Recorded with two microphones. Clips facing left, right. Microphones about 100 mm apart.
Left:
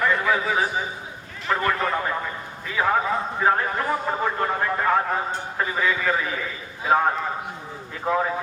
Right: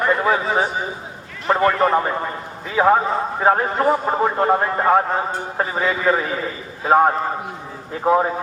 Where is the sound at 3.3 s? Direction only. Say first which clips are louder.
Right 5 dB; 35° right (ahead or behind).